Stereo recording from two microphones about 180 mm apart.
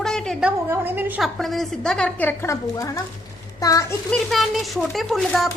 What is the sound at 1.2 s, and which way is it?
A woman's voice, centre (ahead or behind).